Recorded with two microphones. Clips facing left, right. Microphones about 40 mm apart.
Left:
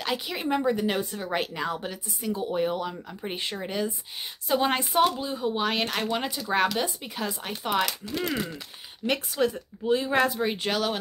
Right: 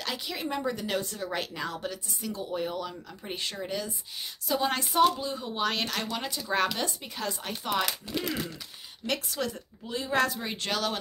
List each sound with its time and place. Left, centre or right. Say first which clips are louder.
0.0 s a woman's voice: left 4 dB; centre
6.4 s a woman's voice: left 2 dB; centre
7.8 s speech: left 3 dB; centre
8.3 s a woman's voice: left 3 dB; centre